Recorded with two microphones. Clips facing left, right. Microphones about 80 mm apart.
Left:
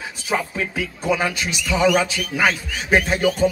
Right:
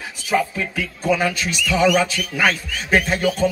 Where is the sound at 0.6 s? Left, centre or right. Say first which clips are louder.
Even; centre.